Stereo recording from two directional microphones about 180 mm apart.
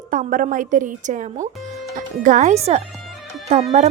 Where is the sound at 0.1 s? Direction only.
50° right (ahead or behind).